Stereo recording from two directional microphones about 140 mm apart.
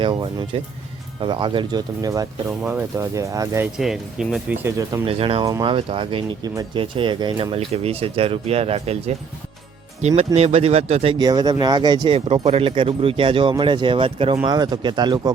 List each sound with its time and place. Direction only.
0.0 s speech: 35° right (ahead or behind)
3.8 s speech: centre (ahead or behind)
4.5 s speech: 20° right (ahead or behind)
5.0 s speech: 40° right (ahead or behind)
11.2 s speech: 25° right (ahead or behind)
12.5 s speech: 45° right (ahead or behind)
14.4 s speech: 30° right (ahead or behind)